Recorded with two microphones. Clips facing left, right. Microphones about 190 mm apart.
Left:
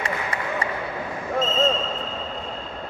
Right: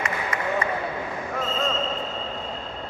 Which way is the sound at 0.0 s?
30° left (ahead or behind).